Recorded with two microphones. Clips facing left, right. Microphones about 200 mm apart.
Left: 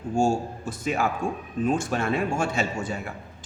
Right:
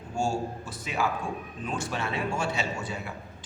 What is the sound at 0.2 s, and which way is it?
A man's voice, 45° left (ahead or behind).